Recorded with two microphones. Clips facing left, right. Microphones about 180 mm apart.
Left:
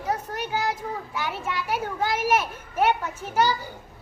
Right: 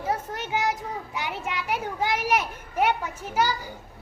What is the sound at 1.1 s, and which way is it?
Children playing, 20° right (ahead or behind).